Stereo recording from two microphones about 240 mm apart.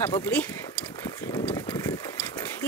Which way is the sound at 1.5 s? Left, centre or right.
Centre.